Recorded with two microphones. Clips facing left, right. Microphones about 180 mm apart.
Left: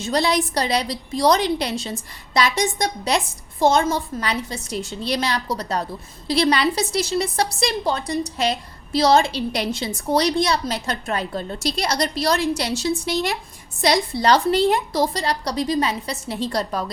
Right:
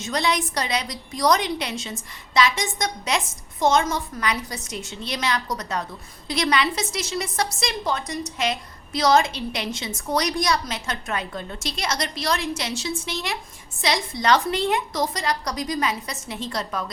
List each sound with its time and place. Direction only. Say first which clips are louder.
0.0 s a woman's voice: left 4 dB; 35° left (ahead or behind)